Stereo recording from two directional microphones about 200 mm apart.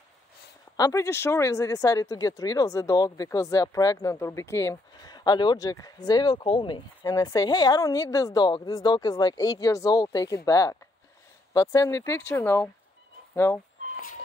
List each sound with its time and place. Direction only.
0.7 s speech: 15° left (ahead or behind)